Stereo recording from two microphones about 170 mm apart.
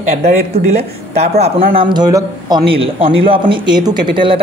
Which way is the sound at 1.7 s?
25° right (ahead or behind).